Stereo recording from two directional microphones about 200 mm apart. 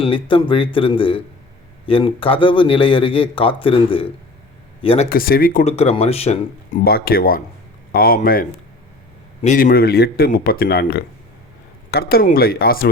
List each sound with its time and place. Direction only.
0.0 s speech: 25° left (ahead or behind)
5.0 s speech: 45° left (ahead or behind)
5.7 s speech: 30° left (ahead or behind)
6.8 s speech: 50° left (ahead or behind)